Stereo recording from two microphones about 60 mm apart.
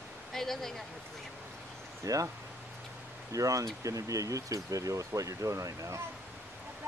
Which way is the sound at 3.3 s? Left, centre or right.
Right.